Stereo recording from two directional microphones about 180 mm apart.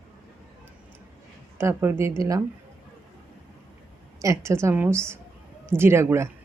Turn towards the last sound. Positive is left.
turn(degrees=-15)  # may be behind; listen again after turning